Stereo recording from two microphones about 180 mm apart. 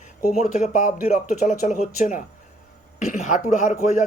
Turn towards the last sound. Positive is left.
turn(degrees=40)  # may be behind; listen again after turning